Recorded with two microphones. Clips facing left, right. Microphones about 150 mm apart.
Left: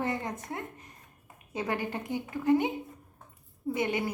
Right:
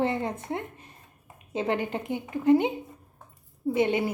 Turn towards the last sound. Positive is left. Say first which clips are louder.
# right 6 dB
turn(degrees=-25)  # may be behind; listen again after turning